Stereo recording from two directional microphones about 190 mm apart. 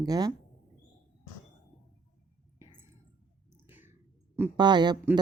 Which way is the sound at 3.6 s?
10° right (ahead or behind).